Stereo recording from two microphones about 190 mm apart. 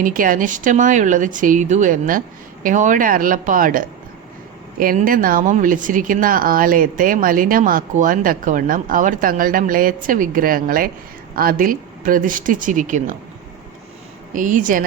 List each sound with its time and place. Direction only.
0.0 s speech: 45° right (ahead or behind)
14.3 s speech: 45° right (ahead or behind)